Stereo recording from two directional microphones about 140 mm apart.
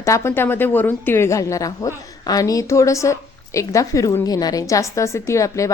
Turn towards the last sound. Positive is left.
turn(degrees=20)  # may be behind; listen again after turning